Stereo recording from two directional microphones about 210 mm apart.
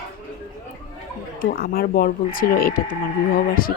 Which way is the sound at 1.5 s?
45° left (ahead or behind).